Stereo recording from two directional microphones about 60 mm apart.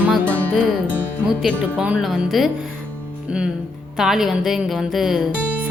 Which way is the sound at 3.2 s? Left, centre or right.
Centre.